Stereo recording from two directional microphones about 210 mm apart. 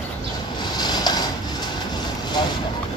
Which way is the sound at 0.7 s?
20° left (ahead or behind).